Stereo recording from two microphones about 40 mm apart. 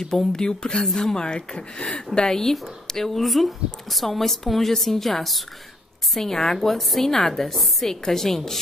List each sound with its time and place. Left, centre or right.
0.3 s a woman's voice: centre